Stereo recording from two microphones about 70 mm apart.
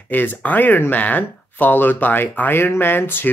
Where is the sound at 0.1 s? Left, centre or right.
Left.